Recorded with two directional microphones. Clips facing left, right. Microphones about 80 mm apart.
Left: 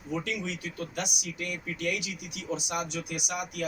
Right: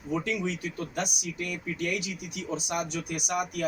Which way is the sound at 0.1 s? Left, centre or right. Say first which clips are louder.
Right 3 dB; right.